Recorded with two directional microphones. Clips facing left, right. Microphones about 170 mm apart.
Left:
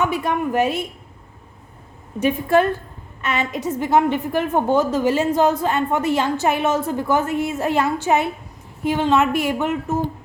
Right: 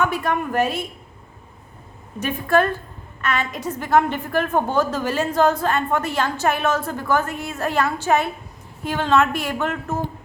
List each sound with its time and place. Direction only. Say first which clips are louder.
0.0 s a woman's voice: left 1 dB; 20° left (ahead or behind)
2.1 s a woman's voice: left 2 dB; 20° left (ahead or behind)